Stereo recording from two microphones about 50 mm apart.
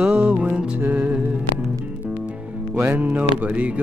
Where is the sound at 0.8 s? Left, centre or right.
Right.